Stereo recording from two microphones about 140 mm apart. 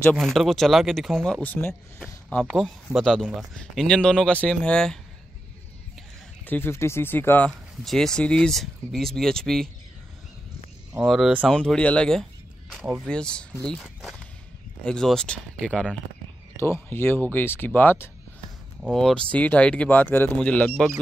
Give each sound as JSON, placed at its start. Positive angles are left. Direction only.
{"t": 0.0, "sound": "speech", "side_deg": 5}
{"t": 6.4, "sound": "speech", "side_deg": 15}
{"t": 7.8, "sound": "speech", "side_deg": 5}
{"t": 11.1, "sound": "speech", "side_deg": -5}
{"t": 12.8, "sound": "speech", "side_deg": -10}
{"t": 13.1, "sound": "speech", "side_deg": 5}
{"t": 16.5, "sound": "speech", "side_deg": 15}
{"t": 18.8, "sound": "speech", "side_deg": 0}